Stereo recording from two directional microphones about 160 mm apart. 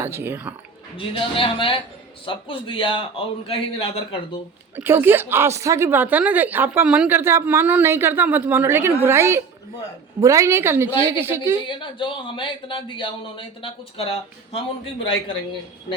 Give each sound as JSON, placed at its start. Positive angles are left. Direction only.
{"t": 0.0, "sound": "a woman's voice", "side_deg": -15}
{"t": 0.9, "sound": "speech", "side_deg": 35}
{"t": 4.8, "sound": "a woman's voice", "side_deg": -15}
{"t": 11.6, "sound": "speech", "side_deg": 30}